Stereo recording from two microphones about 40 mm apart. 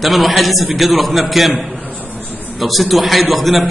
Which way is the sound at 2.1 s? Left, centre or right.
Left.